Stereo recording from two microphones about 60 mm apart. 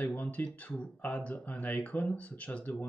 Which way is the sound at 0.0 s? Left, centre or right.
Left.